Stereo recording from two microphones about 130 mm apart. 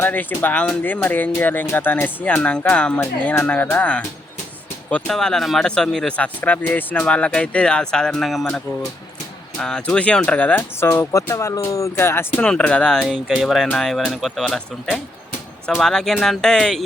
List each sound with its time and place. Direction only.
0.0 s speech: 15° left (ahead or behind)
12.4 s speech: 10° left (ahead or behind)